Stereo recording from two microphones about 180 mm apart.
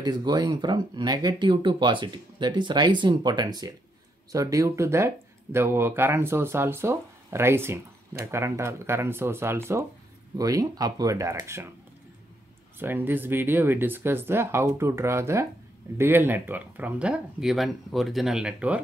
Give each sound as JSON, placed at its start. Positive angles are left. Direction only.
{"t": 0.0, "sound": "speech", "side_deg": -20}
{"t": 12.7, "sound": "speech", "side_deg": -10}